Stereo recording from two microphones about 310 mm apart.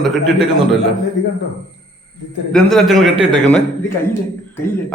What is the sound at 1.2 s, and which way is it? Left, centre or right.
Speech, left.